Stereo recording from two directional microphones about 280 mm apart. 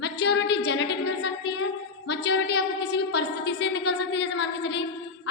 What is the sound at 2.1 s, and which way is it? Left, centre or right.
A woman's voice, left.